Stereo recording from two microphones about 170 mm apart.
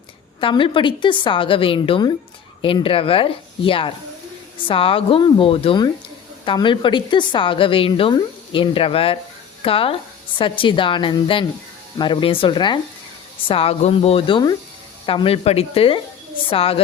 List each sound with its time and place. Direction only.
0.3 s a woman's voice: 30° left (ahead or behind)